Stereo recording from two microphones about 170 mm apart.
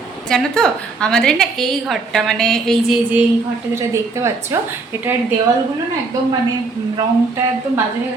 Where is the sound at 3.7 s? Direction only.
15° right (ahead or behind).